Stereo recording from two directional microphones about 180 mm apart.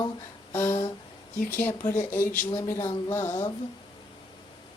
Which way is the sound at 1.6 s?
15° left (ahead or behind).